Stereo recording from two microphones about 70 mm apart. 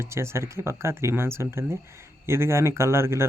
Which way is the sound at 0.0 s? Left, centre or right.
Right.